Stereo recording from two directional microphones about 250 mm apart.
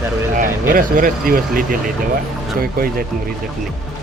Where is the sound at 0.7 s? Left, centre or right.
Right.